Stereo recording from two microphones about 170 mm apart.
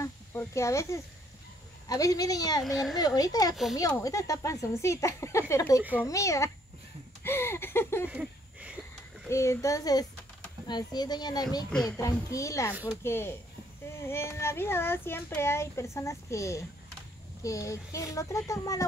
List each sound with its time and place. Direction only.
0.0 s a sound: 15° left (ahead or behind)
1.9 s speech: 20° left (ahead or behind)
2.6 s a child's voice: centre (ahead or behind)
3.2 s speech: 20° left (ahead or behind)
5.8 s a child's voice: 10° right (ahead or behind)
6.0 s speech: 20° left (ahead or behind)
8.1 s a sound: 5° right (ahead or behind)
9.3 s speech: 15° left (ahead or behind)